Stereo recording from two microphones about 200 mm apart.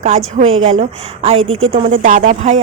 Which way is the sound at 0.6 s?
30° right (ahead or behind).